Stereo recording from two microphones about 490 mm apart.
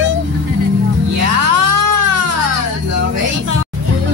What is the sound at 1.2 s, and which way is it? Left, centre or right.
Music, right.